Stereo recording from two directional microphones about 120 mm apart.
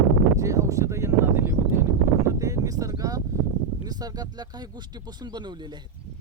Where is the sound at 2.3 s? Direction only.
30° right (ahead or behind).